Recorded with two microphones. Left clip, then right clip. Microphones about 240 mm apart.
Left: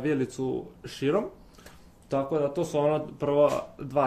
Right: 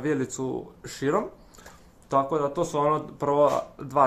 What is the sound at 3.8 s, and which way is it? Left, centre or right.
Speech, centre.